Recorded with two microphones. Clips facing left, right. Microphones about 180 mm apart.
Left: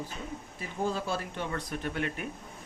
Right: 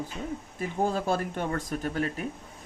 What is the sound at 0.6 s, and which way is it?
Speech, 50° right (ahead or behind).